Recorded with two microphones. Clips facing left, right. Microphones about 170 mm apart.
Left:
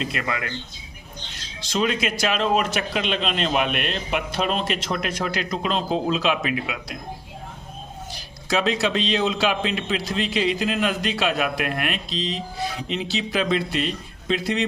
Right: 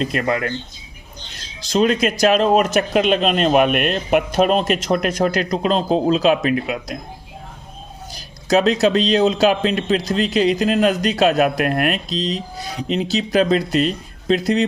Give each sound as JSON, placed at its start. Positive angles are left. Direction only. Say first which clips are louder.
{"t": 0.0, "sound": "speech", "louder": "right 7 dB", "side_deg": -40}
{"t": 1.6, "sound": "speech", "louder": "right 7 dB", "side_deg": -40}
{"t": 8.1, "sound": "a man's voice", "louder": "right 8 dB", "side_deg": -40}